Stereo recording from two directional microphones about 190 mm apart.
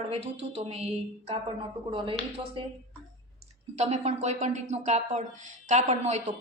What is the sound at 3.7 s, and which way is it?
A woman's voice, 35° right (ahead or behind).